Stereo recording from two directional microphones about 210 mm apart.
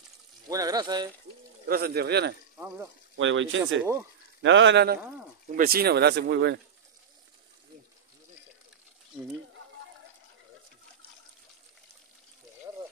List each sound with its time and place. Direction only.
0.5 s speech: 15° right (ahead or behind)
1.7 s speech: 50° right (ahead or behind)
3.2 s speech: 65° right (ahead or behind)
5.6 s speech: 45° right (ahead or behind)